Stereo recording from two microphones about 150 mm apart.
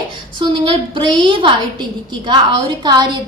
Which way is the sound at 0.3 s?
35° right (ahead or behind).